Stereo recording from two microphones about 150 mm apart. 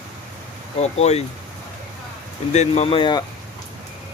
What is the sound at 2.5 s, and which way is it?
Speech, 45° left (ahead or behind).